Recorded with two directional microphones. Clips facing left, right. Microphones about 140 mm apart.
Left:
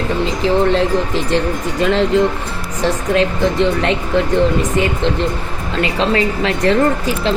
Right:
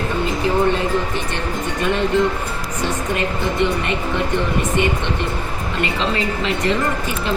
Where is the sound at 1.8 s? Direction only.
90° left.